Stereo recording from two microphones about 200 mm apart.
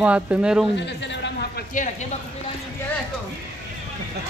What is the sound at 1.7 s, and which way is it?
Speech, 40° left (ahead or behind).